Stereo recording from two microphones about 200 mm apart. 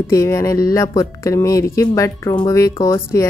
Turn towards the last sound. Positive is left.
turn(degrees=15)  # may be behind; listen again after turning